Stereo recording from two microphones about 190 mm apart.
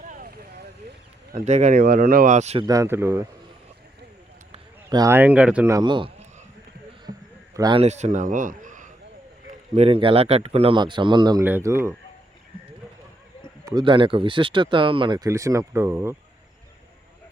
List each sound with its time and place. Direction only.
0.0 s vehicle: 45° right (ahead or behind)
1.3 s speech: 40° right (ahead or behind)
1.8 s speech: 50° right (ahead or behind)
2.6 s speech: 15° right (ahead or behind)
4.5 s speech: 20° right (ahead or behind)
5.7 s speech: 25° right (ahead or behind)
7.1 s a sound: 45° right (ahead or behind)
7.5 s a man's voice: 20° right (ahead or behind)
7.8 s speech: 35° right (ahead or behind); by 11.9 s 15° right (ahead or behind)
13.7 s speech: 25° right (ahead or behind)